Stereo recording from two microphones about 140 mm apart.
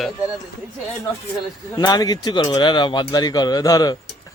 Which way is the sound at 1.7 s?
30° left (ahead or behind).